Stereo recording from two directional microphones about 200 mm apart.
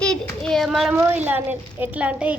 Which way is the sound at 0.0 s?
5° left (ahead or behind).